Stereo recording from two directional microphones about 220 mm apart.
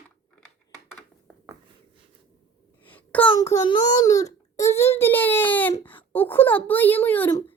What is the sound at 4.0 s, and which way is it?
Speech, 15° left (ahead or behind).